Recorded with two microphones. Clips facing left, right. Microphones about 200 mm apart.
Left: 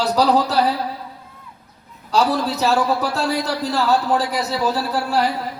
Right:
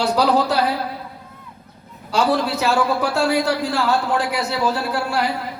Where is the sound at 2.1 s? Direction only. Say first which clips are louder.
Even; 35° left (ahead or behind).